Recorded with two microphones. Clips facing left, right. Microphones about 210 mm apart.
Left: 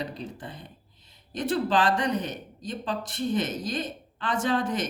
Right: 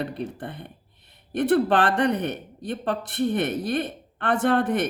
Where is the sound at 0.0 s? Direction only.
60° right (ahead or behind).